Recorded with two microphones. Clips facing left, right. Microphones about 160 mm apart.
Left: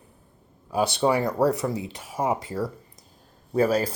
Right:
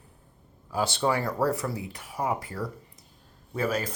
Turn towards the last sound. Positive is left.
turn(degrees=35)  # may be behind; listen again after turning